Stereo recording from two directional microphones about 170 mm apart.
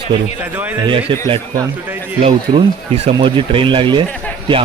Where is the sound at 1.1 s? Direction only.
30° right (ahead or behind).